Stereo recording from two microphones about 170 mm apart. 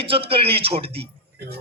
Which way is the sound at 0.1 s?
30° right (ahead or behind).